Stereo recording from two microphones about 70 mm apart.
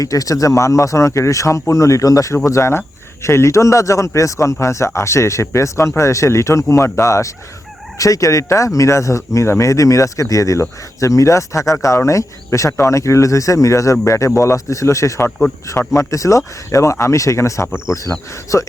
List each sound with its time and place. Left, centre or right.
0.0 s speech: left